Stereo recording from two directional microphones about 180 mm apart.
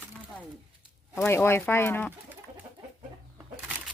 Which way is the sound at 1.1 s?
15° left (ahead or behind).